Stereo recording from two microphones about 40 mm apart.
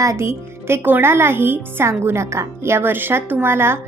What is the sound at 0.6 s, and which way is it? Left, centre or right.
A child's voice, right.